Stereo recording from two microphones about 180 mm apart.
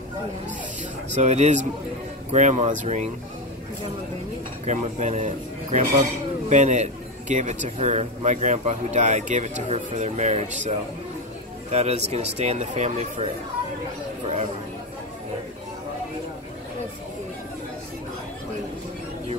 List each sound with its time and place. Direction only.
1.1 s speech: 40° right (ahead or behind)
4.6 s speech: 40° right (ahead or behind)
11.7 s speech: 35° right (ahead or behind)